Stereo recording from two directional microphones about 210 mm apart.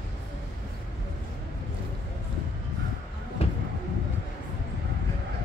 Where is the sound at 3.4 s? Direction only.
30° left (ahead or behind).